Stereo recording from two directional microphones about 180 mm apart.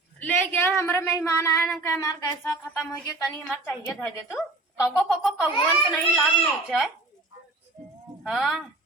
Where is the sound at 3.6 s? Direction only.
15° left (ahead or behind).